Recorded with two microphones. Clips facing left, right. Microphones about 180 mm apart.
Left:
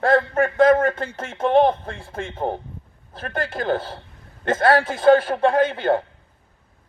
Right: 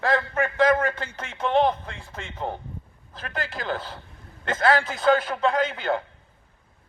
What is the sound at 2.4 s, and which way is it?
Speech, 35° left (ahead or behind).